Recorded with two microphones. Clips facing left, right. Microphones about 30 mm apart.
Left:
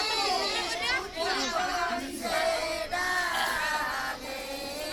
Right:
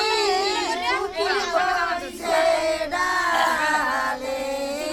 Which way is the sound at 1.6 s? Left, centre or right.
Right.